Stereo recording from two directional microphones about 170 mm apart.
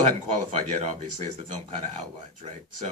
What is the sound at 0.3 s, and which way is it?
Speech, 40° right (ahead or behind).